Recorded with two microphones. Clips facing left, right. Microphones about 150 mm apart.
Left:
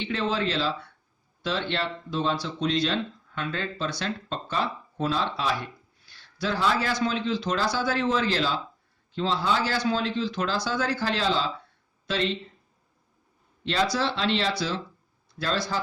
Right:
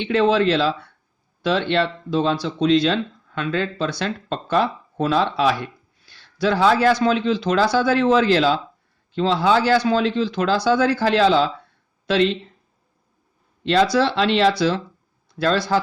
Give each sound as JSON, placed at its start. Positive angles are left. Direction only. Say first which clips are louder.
{"t": 0.0, "sound": "speech", "louder": "right 10 dB", "side_deg": -75}
{"t": 13.7, "sound": "speech", "louder": "right 8 dB", "side_deg": -75}